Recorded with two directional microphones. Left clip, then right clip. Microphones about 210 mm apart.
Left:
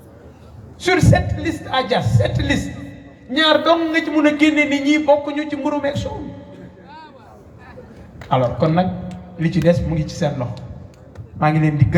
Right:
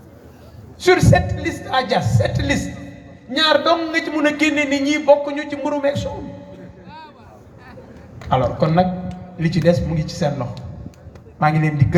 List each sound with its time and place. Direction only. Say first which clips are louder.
0.8 s a man's voice: right 2 dB; 30° right (ahead or behind)
8.3 s a man's voice: left 1 dB; 30° right (ahead or behind)